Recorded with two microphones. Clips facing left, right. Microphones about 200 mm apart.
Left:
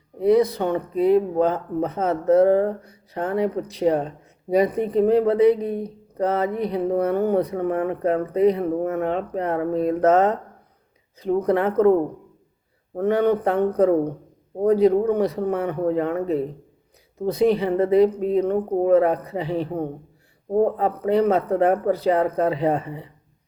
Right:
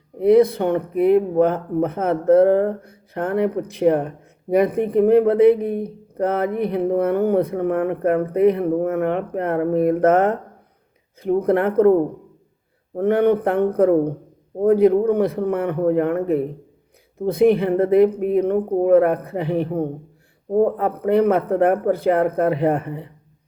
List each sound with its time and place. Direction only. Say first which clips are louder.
0.2 s speech: right 4 dB; 55° right (ahead or behind)
13.0 s speech: right 3 dB; 55° right (ahead or behind)